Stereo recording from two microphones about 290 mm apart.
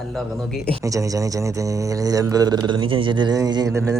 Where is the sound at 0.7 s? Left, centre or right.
Centre.